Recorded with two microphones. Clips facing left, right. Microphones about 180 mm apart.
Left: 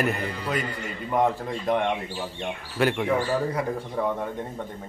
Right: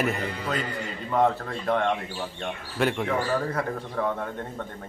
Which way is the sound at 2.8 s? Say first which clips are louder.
Left 2 dB; centre (ahead or behind).